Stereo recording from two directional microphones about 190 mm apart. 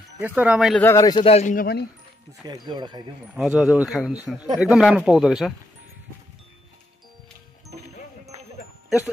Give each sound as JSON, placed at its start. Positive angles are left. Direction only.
{"t": 0.2, "sound": "speech", "side_deg": -5}
{"t": 0.8, "sound": "a man's voice", "side_deg": 20}
{"t": 2.4, "sound": "speech", "side_deg": -20}
{"t": 3.3, "sound": "speech", "side_deg": -5}